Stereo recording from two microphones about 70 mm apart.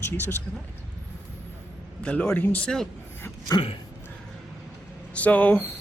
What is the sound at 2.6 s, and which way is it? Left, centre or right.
Speech, centre.